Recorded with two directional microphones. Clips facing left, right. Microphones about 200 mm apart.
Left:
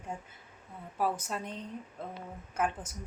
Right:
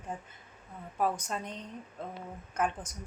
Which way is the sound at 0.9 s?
5° left (ahead or behind).